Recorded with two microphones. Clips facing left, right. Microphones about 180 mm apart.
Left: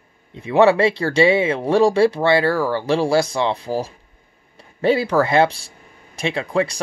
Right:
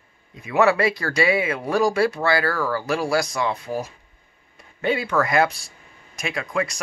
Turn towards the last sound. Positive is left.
turn(degrees=30)  # may be behind; listen again after turning